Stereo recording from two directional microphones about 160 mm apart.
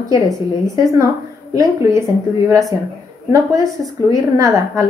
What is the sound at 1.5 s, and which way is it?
Speech, 20° right (ahead or behind).